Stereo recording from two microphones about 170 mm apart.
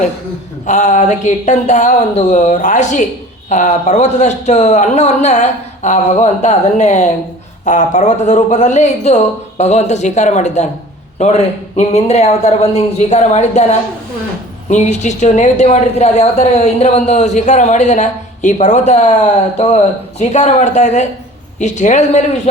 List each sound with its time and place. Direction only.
0.7 s a woman's voice: 45° left (ahead or behind)